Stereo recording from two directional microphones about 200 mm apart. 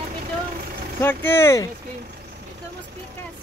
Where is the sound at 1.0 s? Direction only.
10° left (ahead or behind).